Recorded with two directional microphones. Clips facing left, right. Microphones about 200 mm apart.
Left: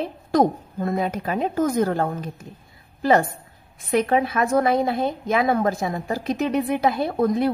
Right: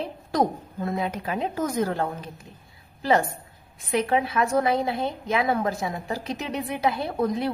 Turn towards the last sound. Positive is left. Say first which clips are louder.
# left 5 dB
turn(degrees=50)  # may be behind; listen again after turning